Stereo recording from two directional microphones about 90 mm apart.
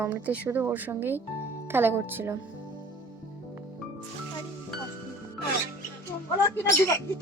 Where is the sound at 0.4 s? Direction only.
30° right (ahead or behind).